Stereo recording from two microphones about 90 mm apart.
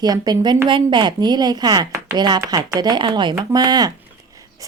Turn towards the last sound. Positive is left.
turn(degrees=-45)  # may be behind; listen again after turning